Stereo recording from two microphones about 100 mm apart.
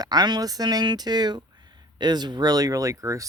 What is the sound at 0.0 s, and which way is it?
Speech, 45° right (ahead or behind).